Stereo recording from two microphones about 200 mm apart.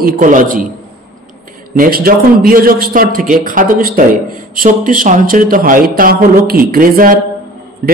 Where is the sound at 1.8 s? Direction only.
45° right (ahead or behind).